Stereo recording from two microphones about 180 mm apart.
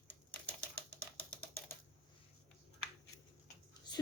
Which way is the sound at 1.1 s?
10° left (ahead or behind).